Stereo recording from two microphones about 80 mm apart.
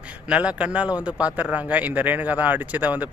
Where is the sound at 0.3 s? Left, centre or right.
Centre.